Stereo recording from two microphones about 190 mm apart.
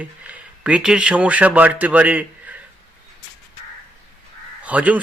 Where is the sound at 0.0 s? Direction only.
5° right (ahead or behind).